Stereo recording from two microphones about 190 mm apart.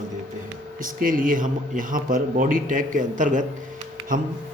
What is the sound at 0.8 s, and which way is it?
A man's voice, 45° right (ahead or behind).